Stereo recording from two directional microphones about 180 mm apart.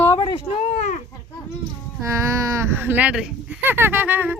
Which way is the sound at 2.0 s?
15° right (ahead or behind).